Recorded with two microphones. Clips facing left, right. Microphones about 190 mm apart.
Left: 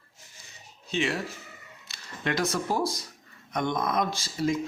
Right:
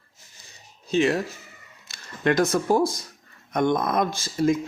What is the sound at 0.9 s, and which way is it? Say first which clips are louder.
Speech: right 7 dB; 40° right (ahead or behind).